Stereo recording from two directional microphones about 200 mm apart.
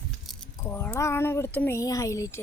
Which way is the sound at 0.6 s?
10° left (ahead or behind).